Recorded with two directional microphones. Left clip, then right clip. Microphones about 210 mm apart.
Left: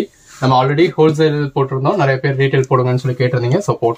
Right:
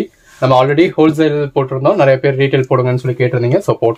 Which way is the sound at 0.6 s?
55° right (ahead or behind).